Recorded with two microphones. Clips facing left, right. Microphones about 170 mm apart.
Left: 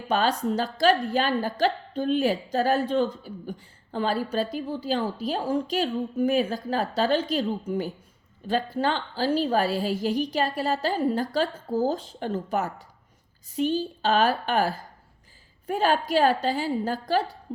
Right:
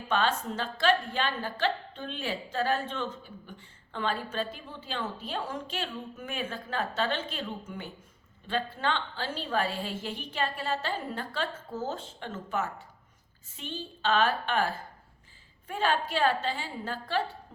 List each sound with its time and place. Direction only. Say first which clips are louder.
0.1 s a woman's voice: left 5 dB; 40° left (ahead or behind)